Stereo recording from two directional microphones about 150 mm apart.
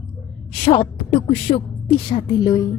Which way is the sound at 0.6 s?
40° left (ahead or behind).